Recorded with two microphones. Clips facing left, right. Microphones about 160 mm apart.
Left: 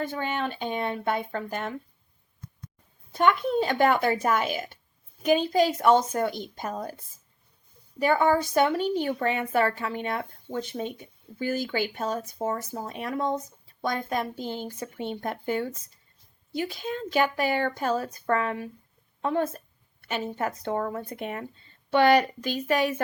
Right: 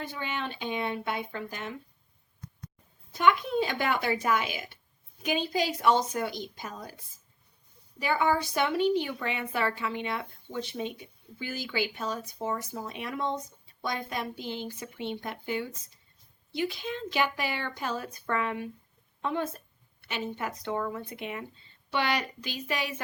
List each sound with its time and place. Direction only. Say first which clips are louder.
0.0 s a woman's voice: left 6 dB; 45° left (ahead or behind)
3.1 s a woman's voice: left 2 dB; 50° left (ahead or behind)